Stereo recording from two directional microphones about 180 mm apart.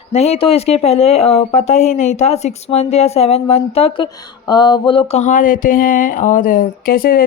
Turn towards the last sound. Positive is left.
turn(degrees=55)  # may be behind; listen again after turning